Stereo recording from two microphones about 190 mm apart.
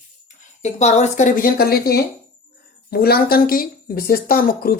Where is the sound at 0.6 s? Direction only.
35° left (ahead or behind).